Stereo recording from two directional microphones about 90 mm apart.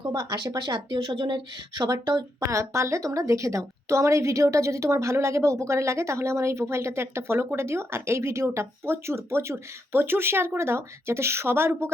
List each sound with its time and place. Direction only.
0.1 s speech: 50° right (ahead or behind)
1.8 s a woman's voice: 45° right (ahead or behind); by 11.9 s 30° right (ahead or behind)